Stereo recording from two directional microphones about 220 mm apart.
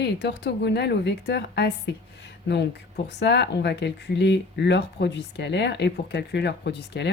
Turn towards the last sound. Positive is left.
turn(degrees=50)  # may be behind; listen again after turning